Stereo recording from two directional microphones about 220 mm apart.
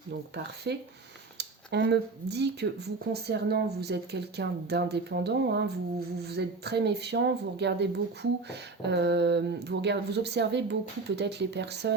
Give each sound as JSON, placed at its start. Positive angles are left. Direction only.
{"t": 0.3, "sound": "speech", "side_deg": -50}